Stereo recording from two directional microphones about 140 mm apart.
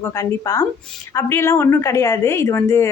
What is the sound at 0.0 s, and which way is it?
Speech, 20° left (ahead or behind).